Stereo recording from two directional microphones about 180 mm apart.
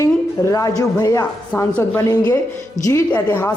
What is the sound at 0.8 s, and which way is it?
A woman's voice, 20° left (ahead or behind).